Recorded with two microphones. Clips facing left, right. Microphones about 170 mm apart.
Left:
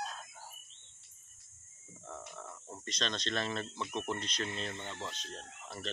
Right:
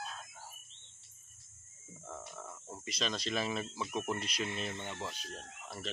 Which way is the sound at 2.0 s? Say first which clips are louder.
Even; 5° right (ahead or behind).